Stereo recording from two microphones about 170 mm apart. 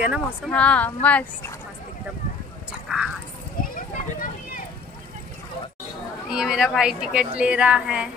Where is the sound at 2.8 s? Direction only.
5° right (ahead or behind).